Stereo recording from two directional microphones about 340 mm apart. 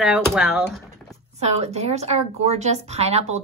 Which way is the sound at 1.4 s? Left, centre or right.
Centre.